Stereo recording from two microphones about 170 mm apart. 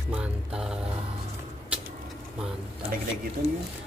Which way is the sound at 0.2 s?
5° right (ahead or behind).